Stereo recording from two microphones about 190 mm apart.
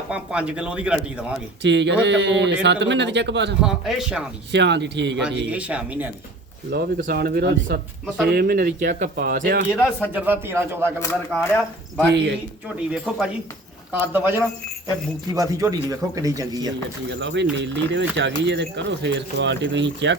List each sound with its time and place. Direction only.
0.1 s speech: 5° right (ahead or behind)
1.6 s speech: 70° right (ahead or behind)
3.6 s speech: centre (ahead or behind)
4.5 s speech: 65° right (ahead or behind)
5.2 s speech: 5° right (ahead or behind)
6.7 s speech: 60° right (ahead or behind)
10.1 s speech: 10° right (ahead or behind)
11.0 s a man's voice: 10° left (ahead or behind); by 16.7 s 20° right (ahead or behind)
17.2 s speech: 70° right (ahead or behind)